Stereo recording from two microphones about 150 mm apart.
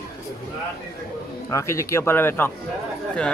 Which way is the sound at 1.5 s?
20° left (ahead or behind).